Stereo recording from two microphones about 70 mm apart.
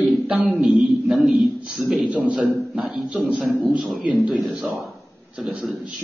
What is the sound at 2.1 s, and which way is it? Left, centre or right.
Speech, right.